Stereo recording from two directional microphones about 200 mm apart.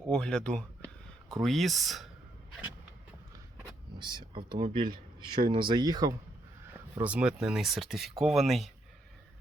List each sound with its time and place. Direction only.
0.1 s speech: 5° left (ahead or behind)
3.9 s speech: 25° right (ahead or behind)
6.9 s speech: 5° right (ahead or behind)